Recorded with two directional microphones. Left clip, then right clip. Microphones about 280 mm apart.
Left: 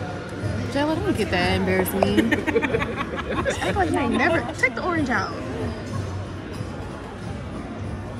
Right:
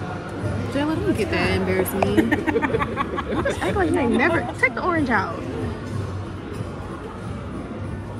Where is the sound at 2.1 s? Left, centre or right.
Centre.